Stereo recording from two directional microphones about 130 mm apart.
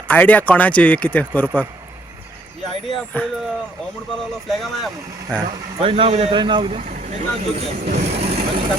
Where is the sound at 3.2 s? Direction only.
10° left (ahead or behind).